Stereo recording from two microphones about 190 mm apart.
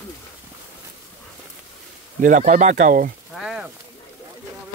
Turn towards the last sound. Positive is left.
turn(degrees=-5)  # may be behind; listen again after turning